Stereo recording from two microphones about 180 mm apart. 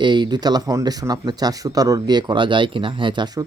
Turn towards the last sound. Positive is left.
turn(degrees=-25)  # may be behind; listen again after turning